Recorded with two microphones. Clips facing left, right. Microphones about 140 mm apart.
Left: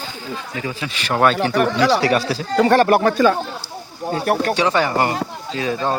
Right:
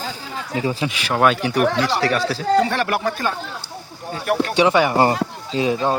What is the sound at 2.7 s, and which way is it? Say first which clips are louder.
Speech: left 8 dB; 35° left (ahead or behind).